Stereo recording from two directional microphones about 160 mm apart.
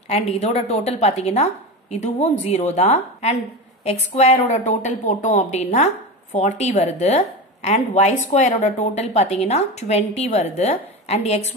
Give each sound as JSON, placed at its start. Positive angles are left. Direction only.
{"t": 0.1, "sound": "a woman's voice", "side_deg": 40}